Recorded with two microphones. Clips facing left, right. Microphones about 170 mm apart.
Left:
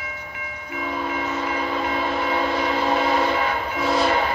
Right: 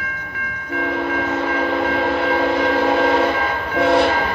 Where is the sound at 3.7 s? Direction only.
65° right (ahead or behind).